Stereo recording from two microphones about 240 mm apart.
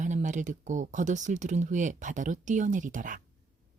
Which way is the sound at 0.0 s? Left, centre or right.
Right.